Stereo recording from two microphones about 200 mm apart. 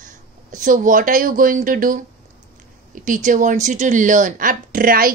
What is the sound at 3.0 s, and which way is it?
A woman's voice, 40° right (ahead or behind).